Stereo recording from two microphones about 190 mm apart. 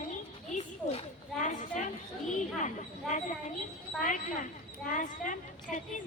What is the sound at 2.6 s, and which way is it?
A woman's voice, 40° left (ahead or behind).